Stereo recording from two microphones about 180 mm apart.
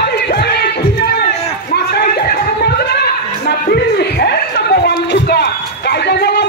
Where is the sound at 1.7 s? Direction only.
60° left (ahead or behind).